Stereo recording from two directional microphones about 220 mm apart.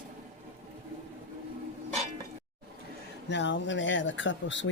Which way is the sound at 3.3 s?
55° left (ahead or behind).